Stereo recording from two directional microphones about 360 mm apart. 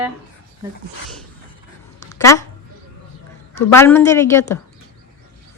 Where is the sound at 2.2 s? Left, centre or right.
Centre.